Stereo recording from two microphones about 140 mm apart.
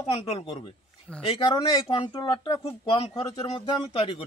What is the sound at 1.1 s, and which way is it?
Speech, 5° left (ahead or behind).